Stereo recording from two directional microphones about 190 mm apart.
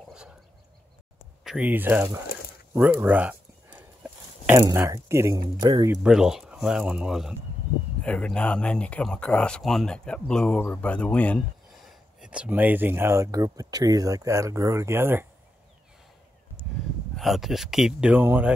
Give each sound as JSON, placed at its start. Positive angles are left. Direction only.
{"t": 1.4, "sound": "speech", "side_deg": -5}
{"t": 2.7, "sound": "a sound", "side_deg": -10}
{"t": 4.6, "sound": "speech", "side_deg": -15}
{"t": 6.0, "sound": "speech", "side_deg": -5}
{"t": 17.1, "sound": "speech", "side_deg": 0}